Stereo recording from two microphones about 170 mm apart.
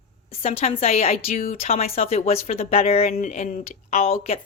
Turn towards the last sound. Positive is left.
turn(degrees=35)  # may be behind; listen again after turning